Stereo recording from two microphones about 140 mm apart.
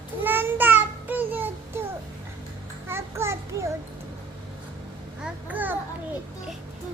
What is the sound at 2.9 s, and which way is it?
Speech, 20° right (ahead or behind).